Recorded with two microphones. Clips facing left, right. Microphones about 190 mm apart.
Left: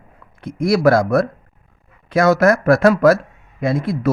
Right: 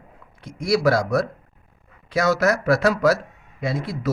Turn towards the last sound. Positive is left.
turn(degrees=55)  # may be behind; listen again after turning